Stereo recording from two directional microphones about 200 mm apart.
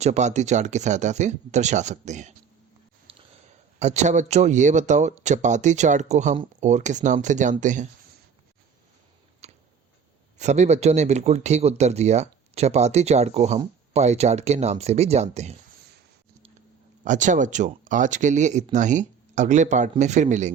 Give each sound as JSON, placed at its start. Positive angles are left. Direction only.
{"t": 0.0, "sound": "speech", "side_deg": -35}
{"t": 3.1, "sound": "a sound", "side_deg": -30}
{"t": 3.8, "sound": "speech", "side_deg": -35}
{"t": 9.4, "sound": "tick", "side_deg": -35}
{"t": 10.3, "sound": "speech", "side_deg": -35}
{"t": 17.0, "sound": "speech", "side_deg": -40}